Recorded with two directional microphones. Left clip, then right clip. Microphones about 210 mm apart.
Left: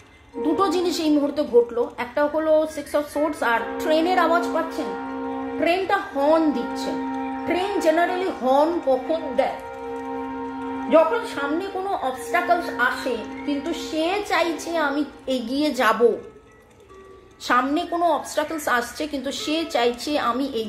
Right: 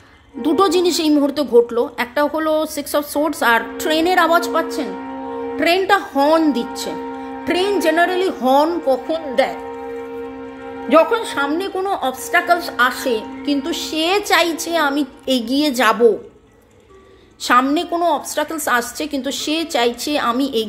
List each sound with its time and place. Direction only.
0.4 s a woman's voice: 35° right (ahead or behind)
10.9 s a man's voice: 45° right (ahead or behind)
17.5 s a woman's voice: 30° right (ahead or behind)